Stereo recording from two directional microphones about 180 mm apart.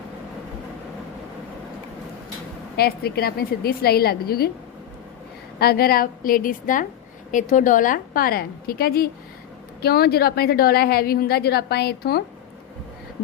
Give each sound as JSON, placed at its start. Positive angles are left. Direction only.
{"t": 2.7, "sound": "a woman's voice", "side_deg": 60}
{"t": 5.5, "sound": "a woman's voice", "side_deg": 60}